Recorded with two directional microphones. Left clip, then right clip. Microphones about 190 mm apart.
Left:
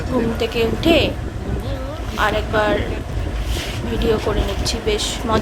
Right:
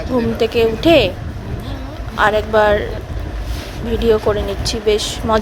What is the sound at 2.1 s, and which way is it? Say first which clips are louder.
Speech: right 5 dB; 40° right (ahead or behind).